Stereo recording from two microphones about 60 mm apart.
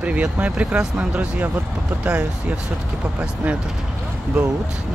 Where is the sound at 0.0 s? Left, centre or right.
Right.